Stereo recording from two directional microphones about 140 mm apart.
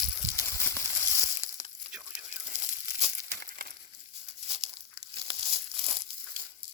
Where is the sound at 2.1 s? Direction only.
60° right (ahead or behind); by 3.7 s 75° right (ahead or behind).